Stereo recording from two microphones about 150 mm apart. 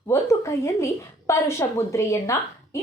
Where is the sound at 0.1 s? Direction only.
20° left (ahead or behind).